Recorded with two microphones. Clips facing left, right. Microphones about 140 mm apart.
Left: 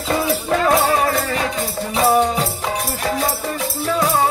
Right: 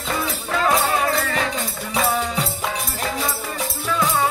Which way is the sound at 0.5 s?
35° left (ahead or behind).